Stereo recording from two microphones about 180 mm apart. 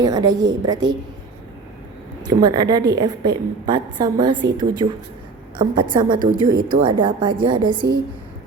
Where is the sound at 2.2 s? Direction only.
25° right (ahead or behind).